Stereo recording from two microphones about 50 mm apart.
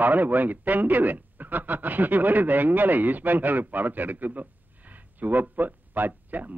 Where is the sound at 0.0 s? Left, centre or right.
Right.